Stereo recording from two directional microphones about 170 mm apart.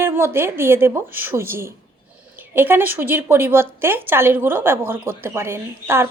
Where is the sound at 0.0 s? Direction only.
15° right (ahead or behind).